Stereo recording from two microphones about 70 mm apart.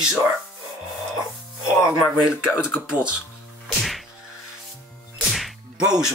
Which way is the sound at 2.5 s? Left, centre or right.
Left.